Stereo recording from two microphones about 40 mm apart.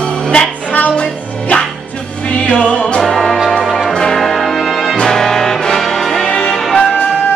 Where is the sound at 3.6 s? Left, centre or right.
Centre.